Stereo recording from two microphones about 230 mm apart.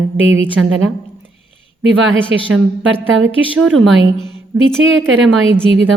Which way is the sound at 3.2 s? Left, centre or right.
Right.